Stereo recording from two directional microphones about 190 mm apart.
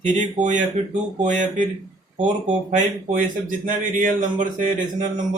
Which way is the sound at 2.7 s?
40° right (ahead or behind).